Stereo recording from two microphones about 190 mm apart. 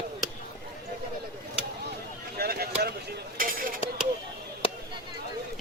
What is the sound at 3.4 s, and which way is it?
Cutlery, 50° right (ahead or behind).